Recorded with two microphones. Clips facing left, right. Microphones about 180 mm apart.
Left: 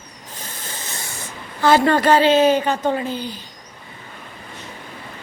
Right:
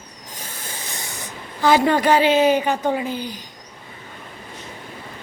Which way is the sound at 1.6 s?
15° right (ahead or behind).